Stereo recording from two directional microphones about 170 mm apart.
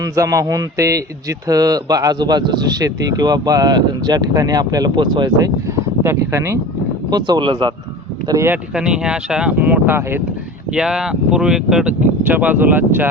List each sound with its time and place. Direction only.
0.0 s a man's voice: 20° right (ahead or behind)
7.1 s a man's voice: 25° right (ahead or behind)
8.3 s speech: 15° right (ahead or behind)